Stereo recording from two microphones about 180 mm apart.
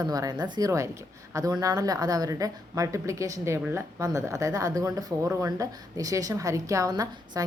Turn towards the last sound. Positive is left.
turn(degrees=-20)  # may be behind; listen again after turning